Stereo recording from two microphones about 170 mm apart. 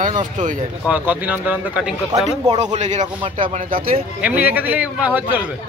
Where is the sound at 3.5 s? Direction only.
55° right (ahead or behind).